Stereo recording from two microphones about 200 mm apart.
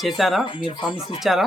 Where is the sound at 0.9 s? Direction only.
30° left (ahead or behind).